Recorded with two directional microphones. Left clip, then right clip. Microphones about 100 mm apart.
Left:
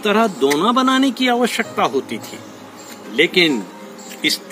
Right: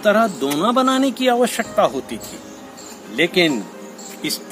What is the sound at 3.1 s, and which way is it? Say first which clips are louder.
Speech: left 2 dB; 60° right (ahead or behind).